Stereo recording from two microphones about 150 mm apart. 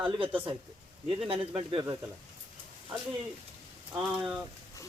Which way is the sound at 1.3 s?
40° right (ahead or behind).